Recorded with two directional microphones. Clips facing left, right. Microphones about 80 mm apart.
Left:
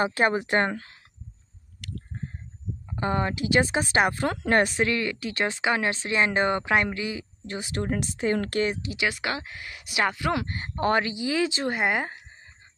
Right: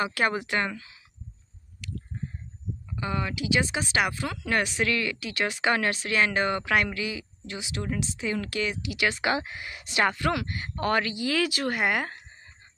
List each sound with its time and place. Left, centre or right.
0.0 s speech: left
1.8 s squish: left
2.9 s speech: left
5.6 s speech: centre; by 8.9 s left
9.4 s speech: centre
9.8 s speech: centre
10.3 s speech: left